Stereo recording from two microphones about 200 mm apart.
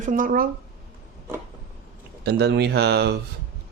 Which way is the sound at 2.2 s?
55° right (ahead or behind).